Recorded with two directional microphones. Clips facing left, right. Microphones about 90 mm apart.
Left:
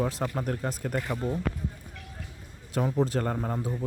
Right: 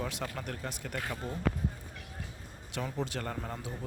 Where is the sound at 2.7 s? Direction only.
40° left (ahead or behind).